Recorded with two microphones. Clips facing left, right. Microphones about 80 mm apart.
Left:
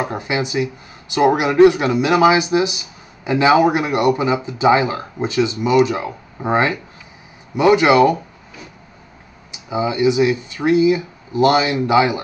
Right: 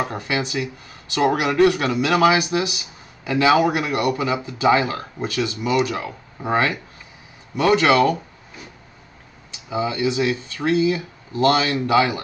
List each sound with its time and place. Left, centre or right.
0.0 s speech: centre
9.5 s speech: centre